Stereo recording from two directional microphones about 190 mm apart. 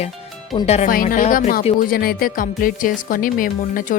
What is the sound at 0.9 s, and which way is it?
Speech, 45° left (ahead or behind).